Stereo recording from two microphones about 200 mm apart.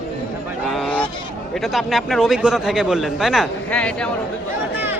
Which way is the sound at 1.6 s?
Centre (ahead or behind).